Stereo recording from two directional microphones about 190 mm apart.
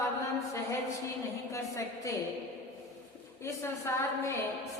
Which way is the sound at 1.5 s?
15° left (ahead or behind).